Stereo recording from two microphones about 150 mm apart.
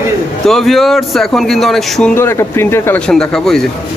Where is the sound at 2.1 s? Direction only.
15° left (ahead or behind).